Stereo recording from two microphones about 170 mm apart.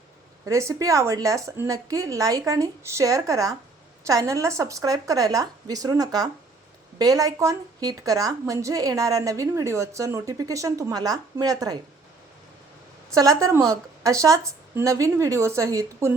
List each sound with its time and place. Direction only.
0.4 s a woman's voice: 20° right (ahead or behind)
13.1 s a woman's voice: 20° right (ahead or behind)